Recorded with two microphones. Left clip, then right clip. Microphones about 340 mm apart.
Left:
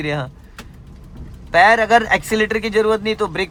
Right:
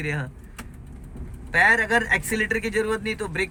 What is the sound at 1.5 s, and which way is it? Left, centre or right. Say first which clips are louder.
Speech: left 7 dB; centre.